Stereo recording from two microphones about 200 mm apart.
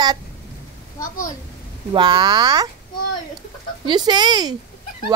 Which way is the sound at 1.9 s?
25° right (ahead or behind).